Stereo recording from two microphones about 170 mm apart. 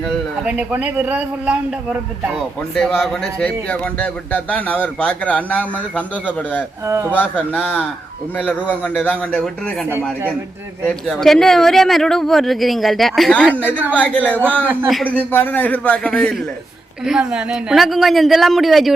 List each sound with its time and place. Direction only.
0.0 s a man's voice: 10° right (ahead or behind)
2.7 s a man's voice: 5° left (ahead or behind)
6.8 s a man's voice: 15° right (ahead or behind)
7.1 s a man's voice: 10° left (ahead or behind)
10.8 s a man's voice: 5° left (ahead or behind)